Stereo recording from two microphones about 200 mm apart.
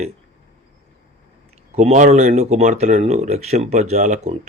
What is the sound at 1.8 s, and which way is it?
Speech, 35° right (ahead or behind).